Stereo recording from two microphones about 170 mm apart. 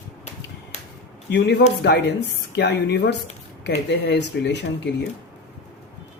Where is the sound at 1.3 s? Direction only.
85° left.